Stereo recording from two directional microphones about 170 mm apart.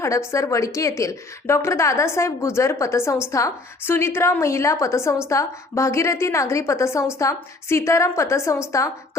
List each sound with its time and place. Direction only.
0.0 s a woman's voice: 15° left (ahead or behind)